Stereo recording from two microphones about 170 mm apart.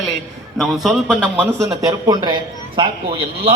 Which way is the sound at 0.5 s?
Centre (ahead or behind).